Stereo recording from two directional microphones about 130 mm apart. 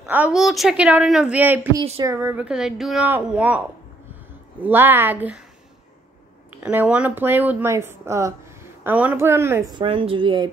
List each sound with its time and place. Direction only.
0.0 s a woman's voice: 10° right (ahead or behind)
0.4 s speech: centre (ahead or behind)
6.6 s speech: 10° right (ahead or behind)
9.8 s a woman's voice: 45° right (ahead or behind)